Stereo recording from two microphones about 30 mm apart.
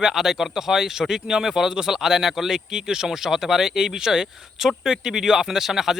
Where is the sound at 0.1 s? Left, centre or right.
Centre.